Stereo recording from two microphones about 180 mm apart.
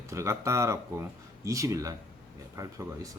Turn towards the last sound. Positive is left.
turn(degrees=-20)  # may be behind; listen again after turning